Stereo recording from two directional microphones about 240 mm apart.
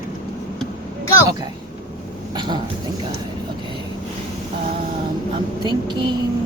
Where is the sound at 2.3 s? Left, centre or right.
Centre.